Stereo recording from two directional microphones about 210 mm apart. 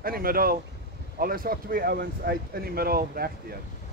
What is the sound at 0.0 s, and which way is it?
Speech, 45° right (ahead or behind).